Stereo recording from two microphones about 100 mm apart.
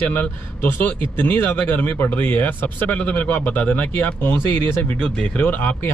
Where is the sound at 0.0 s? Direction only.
15° left (ahead or behind).